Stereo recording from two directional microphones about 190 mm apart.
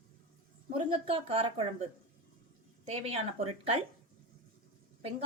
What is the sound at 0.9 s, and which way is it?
A woman's voice, 30° right (ahead or behind).